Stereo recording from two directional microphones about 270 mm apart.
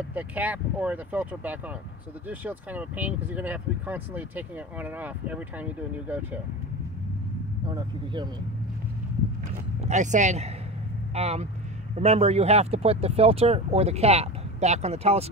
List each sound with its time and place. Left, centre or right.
0.1 s speech: centre
7.7 s speech: centre
9.8 s speech: right